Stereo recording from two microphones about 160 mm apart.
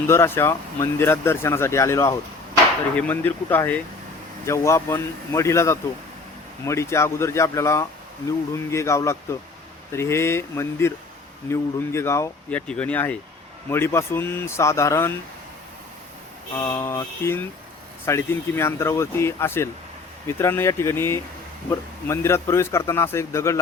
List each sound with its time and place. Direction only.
0.1 s speech: 15° left (ahead or behind)
16.6 s speech: 20° left (ahead or behind)